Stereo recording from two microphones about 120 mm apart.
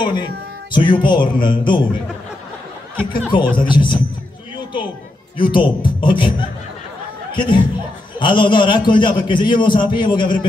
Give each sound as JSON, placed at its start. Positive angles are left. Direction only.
{"t": 0.0, "sound": "a man's voice", "side_deg": 40}
{"t": 3.3, "sound": "a man's voice", "side_deg": 40}
{"t": 5.4, "sound": "a man's voice", "side_deg": 45}
{"t": 7.3, "sound": "a man's voice", "side_deg": 40}